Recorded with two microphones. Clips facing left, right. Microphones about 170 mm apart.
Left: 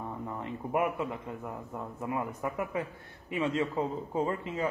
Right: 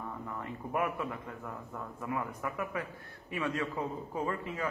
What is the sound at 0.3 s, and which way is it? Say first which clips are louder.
Speech: left 4 dB; 20° left (ahead or behind).